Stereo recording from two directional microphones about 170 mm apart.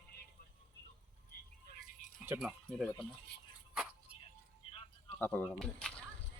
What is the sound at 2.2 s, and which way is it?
Speech, 10° right (ahead or behind).